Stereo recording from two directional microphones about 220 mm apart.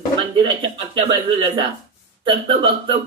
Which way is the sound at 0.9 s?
25° right (ahead or behind).